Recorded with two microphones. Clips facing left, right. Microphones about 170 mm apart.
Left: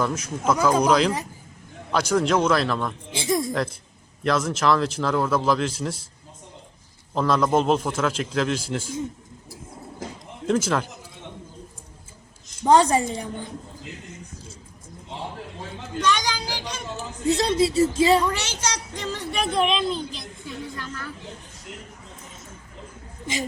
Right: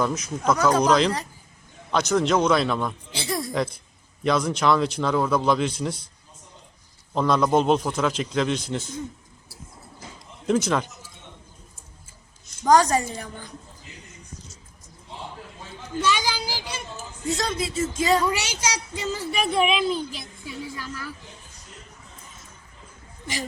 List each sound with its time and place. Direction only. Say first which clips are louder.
0.1 s speech: even; 5° left (ahead or behind)
3.1 s a woman's voice: left 5 dB; 20° left (ahead or behind)
4.2 s speech: even; centre (ahead or behind)
7.1 s speech: even; centre (ahead or behind)
10.6 s speech: even; 5° left (ahead or behind)
12.6 s a woman's voice: left 1 dB; 25° left (ahead or behind)
16.0 s speech: even; 10° right (ahead or behind)
17.0 s a woman's voice: left 5 dB; 30° left (ahead or behind)
18.2 s speech: even; 10° right (ahead or behind)